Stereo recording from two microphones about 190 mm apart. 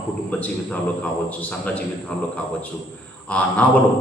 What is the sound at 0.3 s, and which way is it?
A man's voice, 5° left (ahead or behind).